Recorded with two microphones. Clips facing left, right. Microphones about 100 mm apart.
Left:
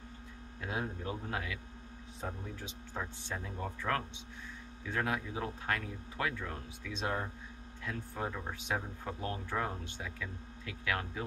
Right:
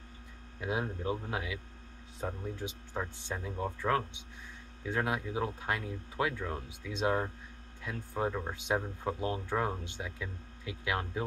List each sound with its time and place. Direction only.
0.6 s speech: 15° right (ahead or behind)